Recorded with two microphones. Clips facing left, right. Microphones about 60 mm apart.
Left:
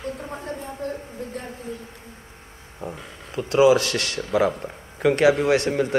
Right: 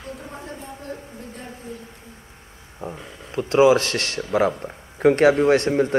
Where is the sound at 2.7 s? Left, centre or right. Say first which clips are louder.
Right 1 dB; centre.